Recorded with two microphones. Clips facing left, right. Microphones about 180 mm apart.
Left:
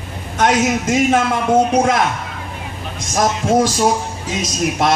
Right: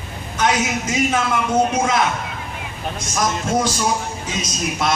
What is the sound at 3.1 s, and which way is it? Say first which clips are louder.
Speech: left 5 dB; 50° left (ahead or behind).